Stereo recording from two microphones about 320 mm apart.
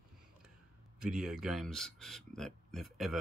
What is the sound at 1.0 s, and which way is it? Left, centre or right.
Speech, centre.